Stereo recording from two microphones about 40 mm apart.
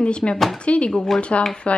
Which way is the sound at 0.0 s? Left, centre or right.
Left.